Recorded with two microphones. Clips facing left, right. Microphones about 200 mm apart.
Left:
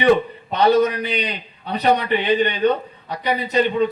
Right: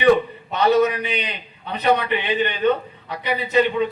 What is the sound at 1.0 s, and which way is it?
A man's voice, 35° left (ahead or behind).